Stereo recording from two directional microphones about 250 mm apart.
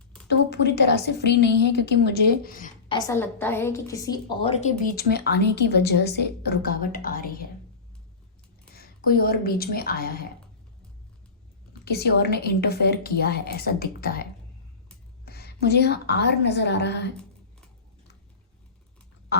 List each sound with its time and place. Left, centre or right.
0.3 s a woman's voice: left
2.9 s a woman's voice: centre; by 7.3 s left
8.7 s a woman's voice: left
11.9 s a woman's voice: left